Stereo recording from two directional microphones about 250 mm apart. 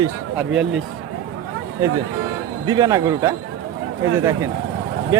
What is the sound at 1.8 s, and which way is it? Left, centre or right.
Speech, centre.